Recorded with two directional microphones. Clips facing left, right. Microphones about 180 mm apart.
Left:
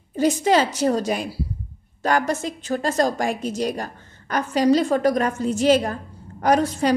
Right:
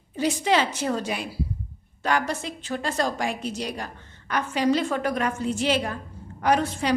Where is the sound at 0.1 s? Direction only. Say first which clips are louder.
Left 5 dB; 45° left (ahead or behind).